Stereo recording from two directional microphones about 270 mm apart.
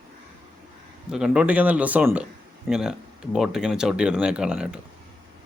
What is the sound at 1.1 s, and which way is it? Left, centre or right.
Speech, centre.